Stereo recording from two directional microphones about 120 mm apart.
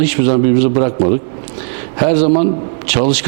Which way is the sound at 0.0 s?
15° right (ahead or behind).